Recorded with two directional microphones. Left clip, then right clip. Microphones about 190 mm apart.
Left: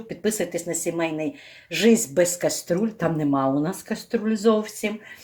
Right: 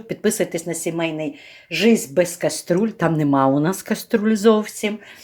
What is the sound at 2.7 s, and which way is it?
Speech, 30° right (ahead or behind).